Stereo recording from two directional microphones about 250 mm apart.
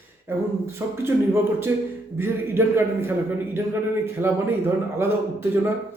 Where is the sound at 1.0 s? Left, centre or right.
Centre.